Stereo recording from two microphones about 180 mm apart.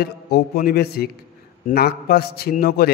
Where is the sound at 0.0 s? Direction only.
60° left (ahead or behind).